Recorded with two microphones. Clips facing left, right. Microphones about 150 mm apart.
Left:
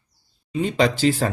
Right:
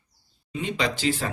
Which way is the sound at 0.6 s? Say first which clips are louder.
Left 8 dB; 35° left (ahead or behind).